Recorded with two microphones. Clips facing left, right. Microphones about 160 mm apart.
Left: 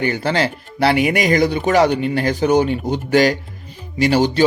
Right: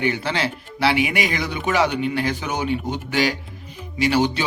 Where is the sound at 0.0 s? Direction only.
40° left (ahead or behind).